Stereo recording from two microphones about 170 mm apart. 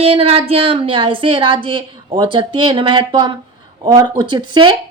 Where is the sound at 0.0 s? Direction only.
35° right (ahead or behind).